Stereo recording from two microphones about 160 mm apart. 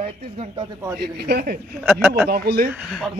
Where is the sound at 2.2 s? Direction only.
75° right (ahead or behind).